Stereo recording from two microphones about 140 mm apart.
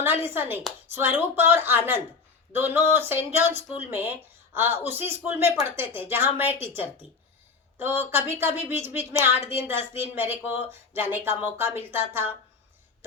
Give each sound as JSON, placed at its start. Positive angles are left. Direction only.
{"t": 0.0, "sound": "a woman's voice", "side_deg": -15}